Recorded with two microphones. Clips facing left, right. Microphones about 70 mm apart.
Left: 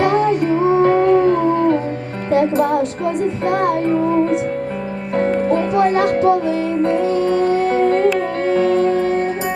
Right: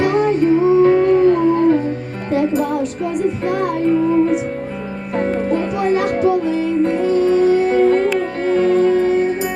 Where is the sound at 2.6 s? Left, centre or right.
Left.